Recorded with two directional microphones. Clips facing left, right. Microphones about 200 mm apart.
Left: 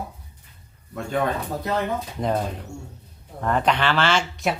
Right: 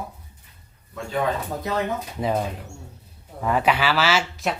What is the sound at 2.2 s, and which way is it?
Speech, 5° right (ahead or behind).